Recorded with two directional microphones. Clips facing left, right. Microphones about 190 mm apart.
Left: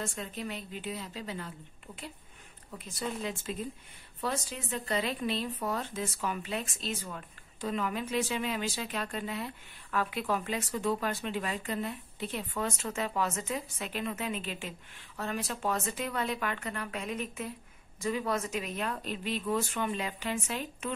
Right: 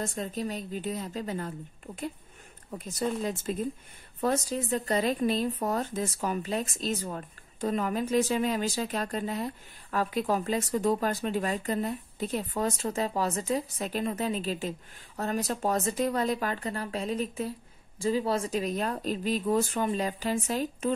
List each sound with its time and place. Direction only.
0.0 s speech: 40° right (ahead or behind)